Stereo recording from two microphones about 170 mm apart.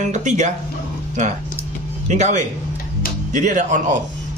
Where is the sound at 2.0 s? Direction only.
45° right (ahead or behind).